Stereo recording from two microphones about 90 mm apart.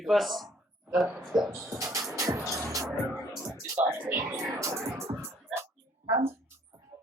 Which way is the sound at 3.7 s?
15° right (ahead or behind).